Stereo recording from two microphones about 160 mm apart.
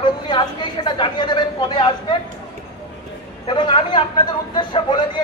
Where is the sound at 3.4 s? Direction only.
30° left (ahead or behind).